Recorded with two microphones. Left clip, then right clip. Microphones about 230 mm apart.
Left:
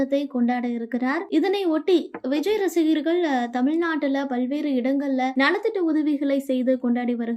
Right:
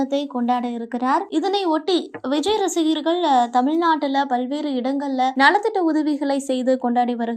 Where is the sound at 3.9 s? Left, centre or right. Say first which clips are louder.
Right 6 dB; centre.